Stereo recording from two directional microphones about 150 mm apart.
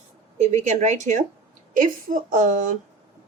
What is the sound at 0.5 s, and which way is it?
A woman's voice, 50° right (ahead or behind).